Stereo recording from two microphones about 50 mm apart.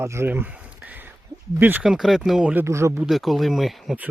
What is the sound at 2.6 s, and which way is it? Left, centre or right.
Speech, right.